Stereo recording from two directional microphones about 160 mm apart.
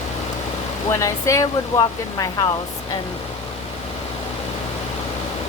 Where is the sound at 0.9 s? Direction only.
20° left (ahead or behind).